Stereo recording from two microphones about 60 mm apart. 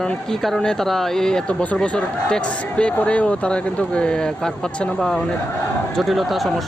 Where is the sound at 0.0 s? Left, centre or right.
Centre.